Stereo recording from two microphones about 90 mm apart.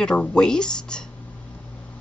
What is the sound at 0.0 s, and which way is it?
Speech, 10° left (ahead or behind).